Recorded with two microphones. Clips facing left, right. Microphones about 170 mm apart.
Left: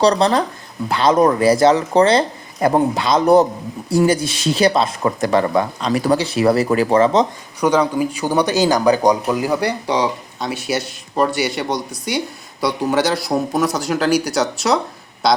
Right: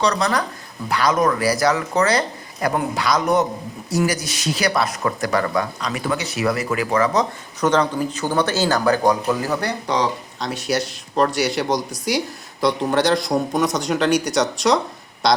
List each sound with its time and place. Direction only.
0.0 s speech: 30° left (ahead or behind)
7.6 s speech: 10° left (ahead or behind)